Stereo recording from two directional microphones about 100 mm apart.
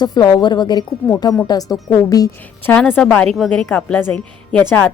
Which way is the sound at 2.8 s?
20° left (ahead or behind).